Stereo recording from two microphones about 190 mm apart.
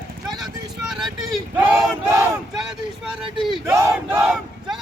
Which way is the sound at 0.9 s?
5° right (ahead or behind).